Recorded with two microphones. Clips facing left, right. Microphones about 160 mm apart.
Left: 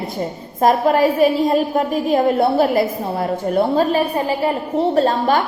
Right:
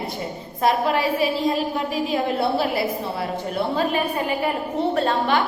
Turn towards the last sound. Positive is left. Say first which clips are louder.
# left 5 dB
turn(degrees=40)  # may be behind; listen again after turning